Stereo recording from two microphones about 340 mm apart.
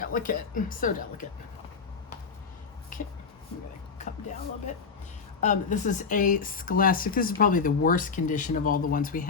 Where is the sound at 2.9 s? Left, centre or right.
Left.